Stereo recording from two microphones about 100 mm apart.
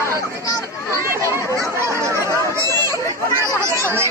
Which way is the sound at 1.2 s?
30° right (ahead or behind).